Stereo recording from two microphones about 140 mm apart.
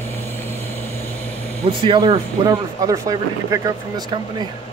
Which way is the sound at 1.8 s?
35° right (ahead or behind).